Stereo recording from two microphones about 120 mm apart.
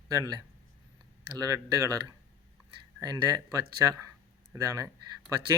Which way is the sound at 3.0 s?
30° right (ahead or behind).